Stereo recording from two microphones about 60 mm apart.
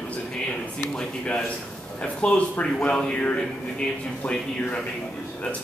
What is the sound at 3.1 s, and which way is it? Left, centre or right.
A man's voice, left.